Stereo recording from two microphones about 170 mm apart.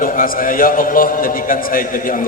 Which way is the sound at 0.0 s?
55° left (ahead or behind).